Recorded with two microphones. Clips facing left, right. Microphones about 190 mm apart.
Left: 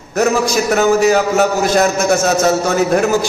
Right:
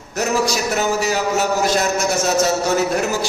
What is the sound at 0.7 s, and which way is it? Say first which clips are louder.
Speech: left 10 dB; 50° left (ahead or behind).